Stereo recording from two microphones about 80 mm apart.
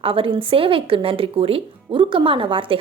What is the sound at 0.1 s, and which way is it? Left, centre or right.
A woman's voice, right.